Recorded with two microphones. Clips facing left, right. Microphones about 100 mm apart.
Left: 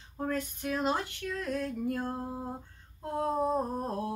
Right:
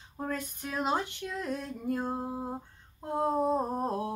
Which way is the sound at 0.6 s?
10° right (ahead or behind).